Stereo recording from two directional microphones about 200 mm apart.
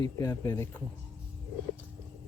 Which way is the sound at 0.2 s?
15° left (ahead or behind).